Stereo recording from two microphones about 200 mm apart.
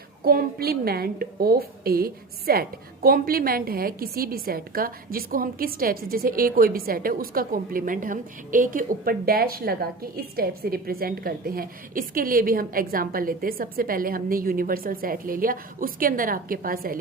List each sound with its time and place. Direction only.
0.2 s a woman's voice: 50° right (ahead or behind)